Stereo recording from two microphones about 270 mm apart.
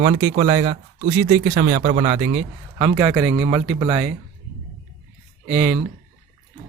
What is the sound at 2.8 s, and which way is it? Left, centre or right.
Speech, centre.